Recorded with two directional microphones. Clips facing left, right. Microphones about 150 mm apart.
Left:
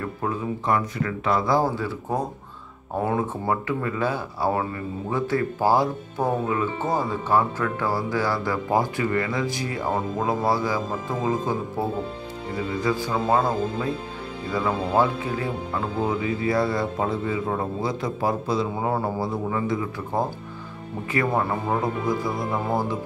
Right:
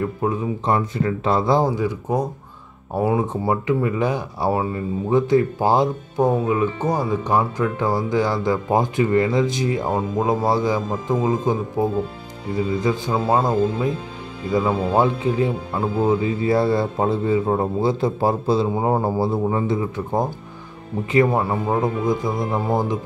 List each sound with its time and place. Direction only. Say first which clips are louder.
0.0 s speech: right 5 dB; 25° right (ahead or behind)